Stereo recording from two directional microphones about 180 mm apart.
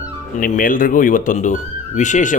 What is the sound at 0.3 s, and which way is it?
Speech, 50° left (ahead or behind).